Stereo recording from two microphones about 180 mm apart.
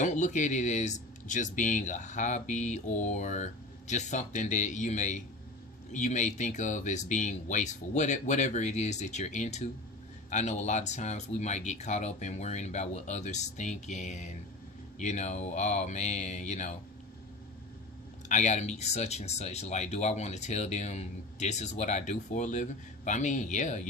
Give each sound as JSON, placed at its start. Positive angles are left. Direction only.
{"t": 0.0, "sound": "speech", "side_deg": 40}
{"t": 18.3, "sound": "speech", "side_deg": 40}